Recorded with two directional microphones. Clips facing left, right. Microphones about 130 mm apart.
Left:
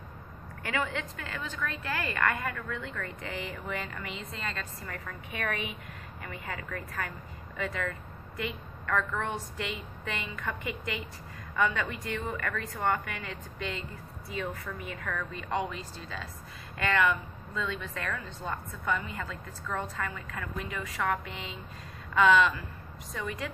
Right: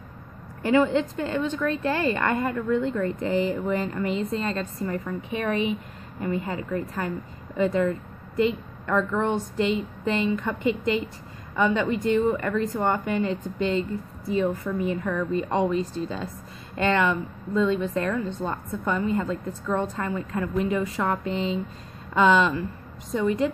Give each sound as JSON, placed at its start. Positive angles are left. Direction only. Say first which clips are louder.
{"t": 0.6, "sound": "a woman's voice", "louder": "right 13 dB", "side_deg": -30}